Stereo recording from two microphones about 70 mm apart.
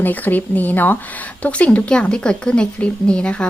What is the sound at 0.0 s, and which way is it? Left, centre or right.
Speech, left.